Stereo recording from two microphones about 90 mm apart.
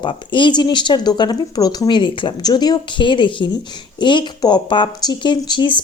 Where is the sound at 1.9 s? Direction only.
60° left (ahead or behind).